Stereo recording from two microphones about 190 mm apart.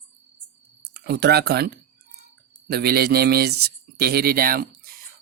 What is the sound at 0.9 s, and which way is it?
Speech, 60° right (ahead or behind).